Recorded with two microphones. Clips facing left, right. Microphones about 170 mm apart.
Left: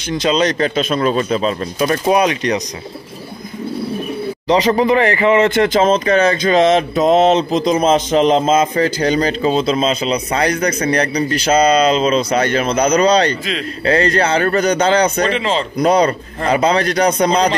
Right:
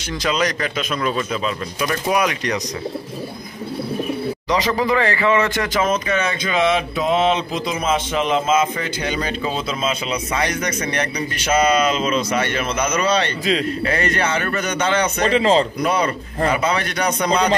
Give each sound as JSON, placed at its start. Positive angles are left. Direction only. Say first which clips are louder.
{"t": 0.1, "sound": "speech", "louder": "left 6 dB", "side_deg": 25}
{"t": 4.5, "sound": "speech", "louder": "left 7 dB", "side_deg": 25}
{"t": 15.2, "sound": "speech", "louder": "right 2 dB", "side_deg": -35}
{"t": 15.8, "sound": "speech", "louder": "left 7 dB", "side_deg": 40}